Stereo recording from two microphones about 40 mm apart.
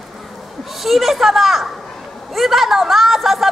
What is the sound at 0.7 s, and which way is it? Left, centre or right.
Speech, centre.